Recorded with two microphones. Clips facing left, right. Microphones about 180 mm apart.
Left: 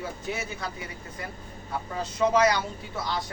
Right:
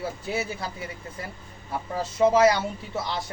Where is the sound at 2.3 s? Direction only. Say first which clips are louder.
Right 3 dB; 25° right (ahead or behind).